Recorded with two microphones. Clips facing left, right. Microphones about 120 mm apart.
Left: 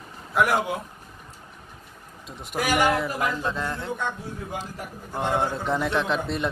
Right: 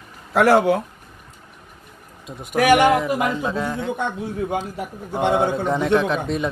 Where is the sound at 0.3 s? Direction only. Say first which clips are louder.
Right 8 dB; 80° right.